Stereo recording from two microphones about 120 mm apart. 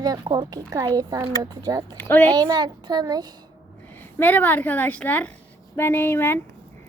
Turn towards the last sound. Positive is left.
turn(degrees=15)  # may be behind; listen again after turning